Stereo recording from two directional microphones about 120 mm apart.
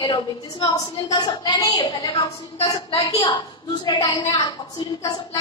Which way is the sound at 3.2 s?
35° left (ahead or behind).